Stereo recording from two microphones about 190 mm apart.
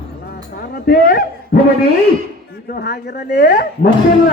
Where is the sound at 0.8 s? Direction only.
55° left (ahead or behind).